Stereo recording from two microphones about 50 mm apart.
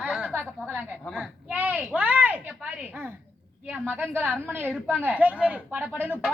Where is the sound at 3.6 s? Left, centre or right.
Right.